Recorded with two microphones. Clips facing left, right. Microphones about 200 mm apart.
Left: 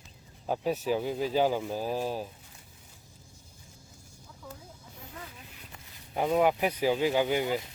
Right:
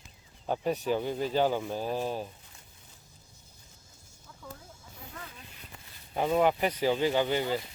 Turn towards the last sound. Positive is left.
turn(degrees=10)  # may be behind; listen again after turning